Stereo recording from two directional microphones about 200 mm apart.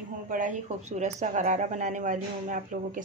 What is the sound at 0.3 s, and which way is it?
Speech, 40° right (ahead or behind).